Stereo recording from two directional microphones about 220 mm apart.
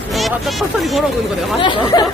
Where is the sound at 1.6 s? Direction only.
20° left (ahead or behind).